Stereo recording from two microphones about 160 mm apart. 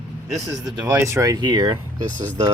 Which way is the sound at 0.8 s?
15° right (ahead or behind).